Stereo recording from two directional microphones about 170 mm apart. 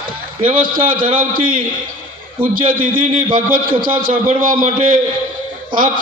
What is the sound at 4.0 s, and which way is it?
Speech, 55° right (ahead or behind).